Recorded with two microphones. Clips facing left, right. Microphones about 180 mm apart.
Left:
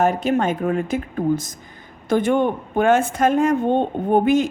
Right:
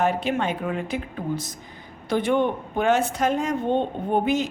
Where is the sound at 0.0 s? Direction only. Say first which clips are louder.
Left 5 dB; 45° left (ahead or behind).